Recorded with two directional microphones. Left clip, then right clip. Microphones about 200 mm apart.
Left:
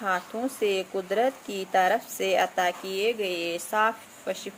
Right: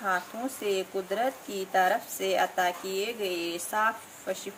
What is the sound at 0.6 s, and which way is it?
Speech, 40° left (ahead or behind).